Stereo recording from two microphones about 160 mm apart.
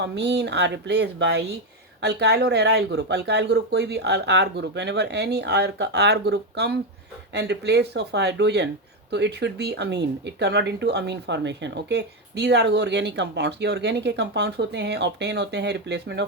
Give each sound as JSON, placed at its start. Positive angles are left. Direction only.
{"t": 0.0, "sound": "speech", "side_deg": -90}